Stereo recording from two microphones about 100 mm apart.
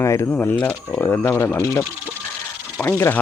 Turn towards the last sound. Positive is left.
turn(degrees=25)  # may be behind; listen again after turning